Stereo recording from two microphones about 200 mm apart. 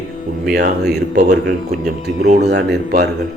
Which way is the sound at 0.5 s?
55° right (ahead or behind).